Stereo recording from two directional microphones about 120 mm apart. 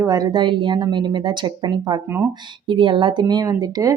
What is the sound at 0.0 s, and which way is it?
Speech, 30° right (ahead or behind).